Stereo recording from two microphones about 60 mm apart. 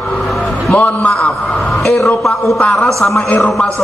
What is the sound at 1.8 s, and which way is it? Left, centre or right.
Speech, centre.